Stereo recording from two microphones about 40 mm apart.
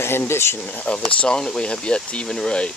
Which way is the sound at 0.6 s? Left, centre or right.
Left.